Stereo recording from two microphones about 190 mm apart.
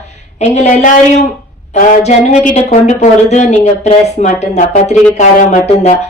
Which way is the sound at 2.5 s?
40° left (ahead or behind).